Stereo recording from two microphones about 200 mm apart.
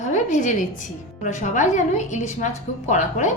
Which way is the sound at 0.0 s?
40° left (ahead or behind).